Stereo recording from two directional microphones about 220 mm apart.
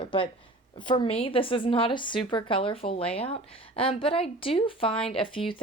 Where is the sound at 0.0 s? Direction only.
20° left (ahead or behind).